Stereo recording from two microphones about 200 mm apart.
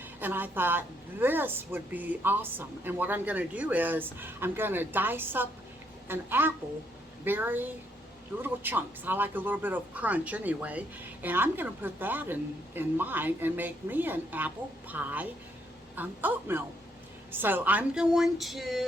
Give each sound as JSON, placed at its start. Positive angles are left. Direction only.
{"t": 0.2, "sound": "a woman's voice", "side_deg": -10}